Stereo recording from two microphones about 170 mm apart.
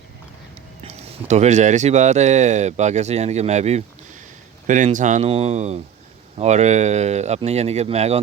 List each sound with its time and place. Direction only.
0.9 s speech: 40° right (ahead or behind)